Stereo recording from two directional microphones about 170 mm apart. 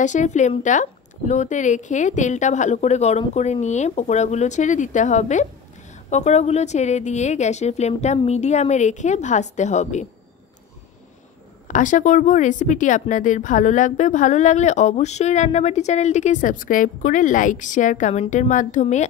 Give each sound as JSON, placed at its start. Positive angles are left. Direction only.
{"t": 0.0, "sound": "speech", "side_deg": 45}
{"t": 11.6, "sound": "speech", "side_deg": 50}